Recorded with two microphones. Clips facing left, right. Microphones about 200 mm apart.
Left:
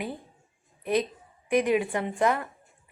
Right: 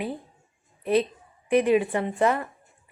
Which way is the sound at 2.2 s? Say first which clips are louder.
Right 2 dB; 5° right (ahead or behind).